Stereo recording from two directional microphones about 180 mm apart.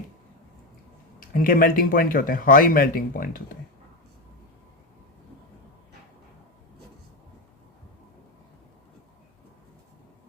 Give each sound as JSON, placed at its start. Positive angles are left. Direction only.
{"t": 1.2, "sound": "speech", "side_deg": 50}